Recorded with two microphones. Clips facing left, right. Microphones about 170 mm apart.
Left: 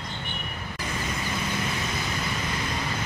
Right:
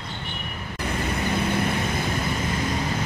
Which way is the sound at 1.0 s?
60° right (ahead or behind).